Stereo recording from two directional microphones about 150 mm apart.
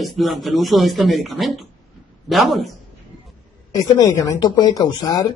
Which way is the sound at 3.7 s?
25° left (ahead or behind).